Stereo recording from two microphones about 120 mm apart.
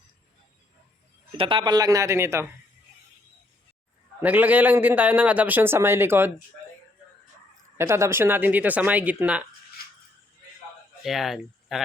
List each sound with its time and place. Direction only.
1.4 s a man's voice: 45° right (ahead or behind); by 2.5 s 20° right (ahead or behind)
4.2 s a man's voice: 15° right (ahead or behind)
7.8 s a man's voice: 25° right (ahead or behind)
11.0 s speech: centre (ahead or behind)